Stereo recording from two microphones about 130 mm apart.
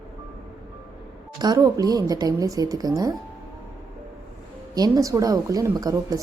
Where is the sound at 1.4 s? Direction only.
30° right (ahead or behind).